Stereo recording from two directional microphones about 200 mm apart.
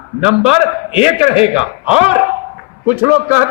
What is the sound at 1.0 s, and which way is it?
A man's voice, 5° right (ahead or behind).